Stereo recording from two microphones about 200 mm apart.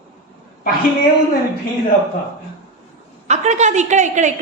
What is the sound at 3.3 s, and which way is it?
A woman's voice, 35° right (ahead or behind).